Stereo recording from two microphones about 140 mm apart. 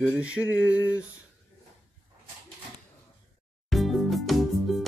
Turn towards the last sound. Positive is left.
turn(degrees=0)  # may be behind; listen again after turning